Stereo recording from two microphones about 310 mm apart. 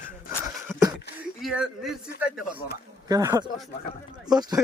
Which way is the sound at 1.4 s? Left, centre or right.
Centre.